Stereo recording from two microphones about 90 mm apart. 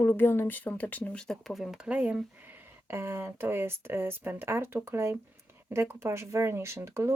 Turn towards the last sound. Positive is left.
turn(degrees=-30)  # may be behind; listen again after turning